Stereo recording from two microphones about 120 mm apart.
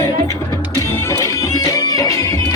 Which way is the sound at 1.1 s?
30° left (ahead or behind).